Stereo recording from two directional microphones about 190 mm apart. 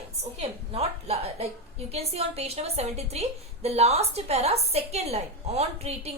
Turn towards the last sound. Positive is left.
turn(degrees=-35)  # may be behind; listen again after turning